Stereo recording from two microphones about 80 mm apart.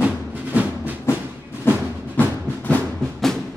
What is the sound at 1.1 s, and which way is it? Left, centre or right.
Music, left.